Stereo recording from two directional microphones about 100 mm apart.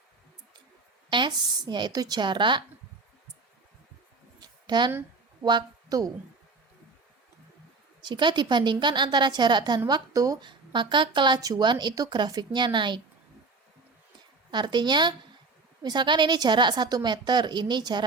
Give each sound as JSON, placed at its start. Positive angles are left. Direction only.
{"t": 1.1, "sound": "a woman's voice", "side_deg": -50}
{"t": 4.4, "sound": "a sound", "side_deg": -45}
{"t": 5.5, "sound": "a woman's voice", "side_deg": -40}
{"t": 8.0, "sound": "a woman's voice", "side_deg": -50}
{"t": 10.4, "sound": "a woman's voice", "side_deg": -50}
{"t": 14.5, "sound": "a woman's voice", "side_deg": -50}